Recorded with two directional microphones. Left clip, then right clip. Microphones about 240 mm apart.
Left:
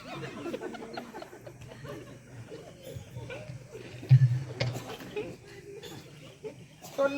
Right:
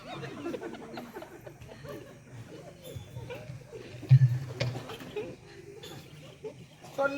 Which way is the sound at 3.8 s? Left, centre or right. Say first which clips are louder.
Even; centre.